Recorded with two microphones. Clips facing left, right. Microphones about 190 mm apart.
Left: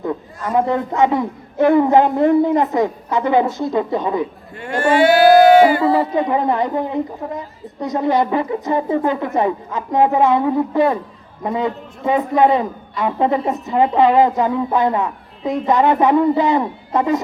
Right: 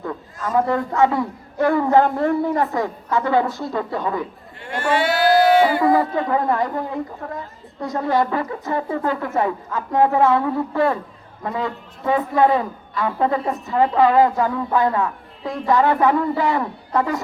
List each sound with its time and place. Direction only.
0.0 s a man's voice: 20° left (ahead or behind)
6.0 s a man's voice: 20° left (ahead or behind)